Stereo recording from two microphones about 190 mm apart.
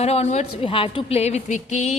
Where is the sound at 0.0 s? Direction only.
35° left (ahead or behind).